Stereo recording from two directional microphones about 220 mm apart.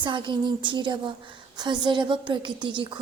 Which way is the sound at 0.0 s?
20° right (ahead or behind).